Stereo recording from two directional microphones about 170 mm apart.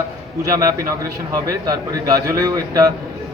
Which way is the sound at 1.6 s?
20° right (ahead or behind).